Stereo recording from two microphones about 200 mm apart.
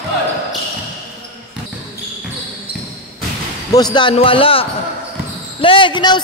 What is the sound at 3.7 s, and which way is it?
A man's voice, 20° left (ahead or behind).